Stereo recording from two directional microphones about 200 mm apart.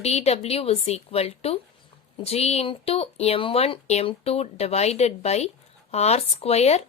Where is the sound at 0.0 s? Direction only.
30° left (ahead or behind).